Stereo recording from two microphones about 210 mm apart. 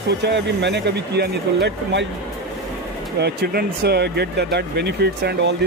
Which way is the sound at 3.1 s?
50° right (ahead or behind).